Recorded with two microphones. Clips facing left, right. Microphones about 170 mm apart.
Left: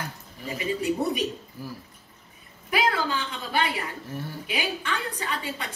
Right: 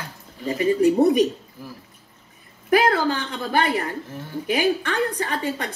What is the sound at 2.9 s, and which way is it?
Speech, 40° right (ahead or behind).